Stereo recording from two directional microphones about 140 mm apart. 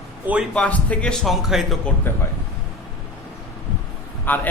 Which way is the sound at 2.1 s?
15° left (ahead or behind).